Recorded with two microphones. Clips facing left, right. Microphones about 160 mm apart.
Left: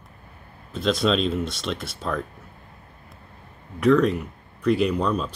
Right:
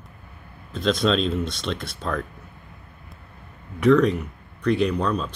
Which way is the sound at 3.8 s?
Centre (ahead or behind).